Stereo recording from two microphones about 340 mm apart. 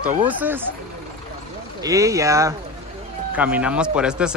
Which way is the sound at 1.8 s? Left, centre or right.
Centre.